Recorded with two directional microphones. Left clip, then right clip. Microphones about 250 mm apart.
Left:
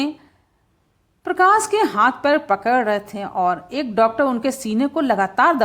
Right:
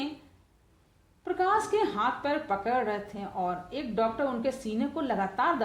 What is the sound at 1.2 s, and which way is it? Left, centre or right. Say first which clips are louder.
A woman's voice: left 12 dB; left.